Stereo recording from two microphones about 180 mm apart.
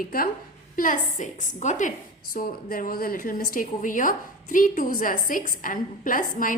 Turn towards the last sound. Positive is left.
turn(degrees=50)  # may be behind; listen again after turning